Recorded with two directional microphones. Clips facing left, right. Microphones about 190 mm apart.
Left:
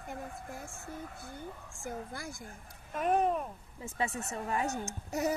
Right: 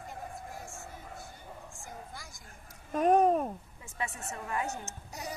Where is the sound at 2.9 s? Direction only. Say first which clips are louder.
Right 5 dB; 40° right (ahead or behind).